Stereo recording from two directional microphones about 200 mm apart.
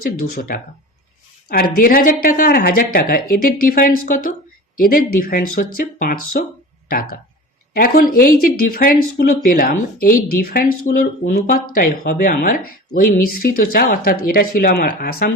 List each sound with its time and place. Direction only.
0.0 s speech: 45° left (ahead or behind)